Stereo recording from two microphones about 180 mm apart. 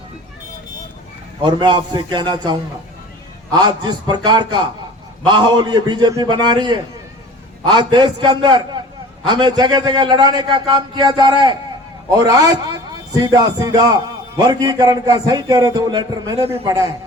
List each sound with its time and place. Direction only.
1.4 s a man's voice: 25° right (ahead or behind)